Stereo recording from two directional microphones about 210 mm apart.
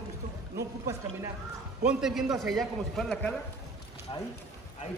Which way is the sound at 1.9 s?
Centre (ahead or behind).